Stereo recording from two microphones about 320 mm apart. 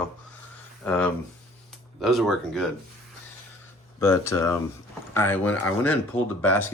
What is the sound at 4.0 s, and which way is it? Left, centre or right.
Speech, centre.